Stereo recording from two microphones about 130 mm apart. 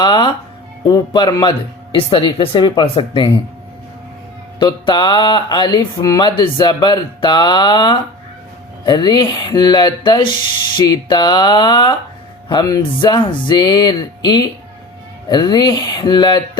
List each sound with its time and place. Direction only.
0.0 s speech: 35° left (ahead or behind)
4.6 s speech: 35° left (ahead or behind)